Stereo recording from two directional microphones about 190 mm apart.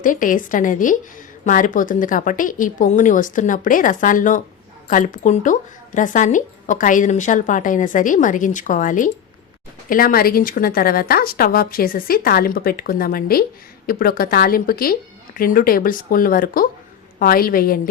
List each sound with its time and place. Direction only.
0.0 s a woman's voice: 45° left (ahead or behind)